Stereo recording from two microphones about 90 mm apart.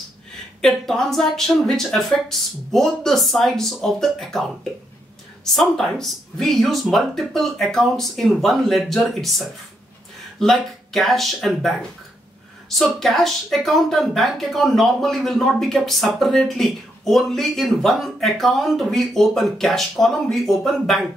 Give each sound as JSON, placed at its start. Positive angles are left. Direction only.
{"t": 0.6, "sound": "speech", "side_deg": 5}
{"t": 10.4, "sound": "speech", "side_deg": 5}